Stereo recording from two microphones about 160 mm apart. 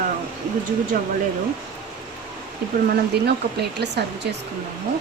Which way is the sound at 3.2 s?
90° right.